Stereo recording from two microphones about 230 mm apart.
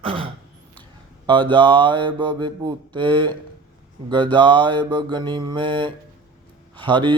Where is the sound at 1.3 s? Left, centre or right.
Right.